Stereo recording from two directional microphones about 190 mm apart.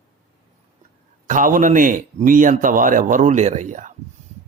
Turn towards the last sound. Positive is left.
turn(degrees=-40)  # may be behind; listen again after turning